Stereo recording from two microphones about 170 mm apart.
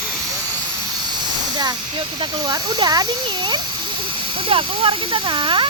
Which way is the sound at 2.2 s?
25° right (ahead or behind).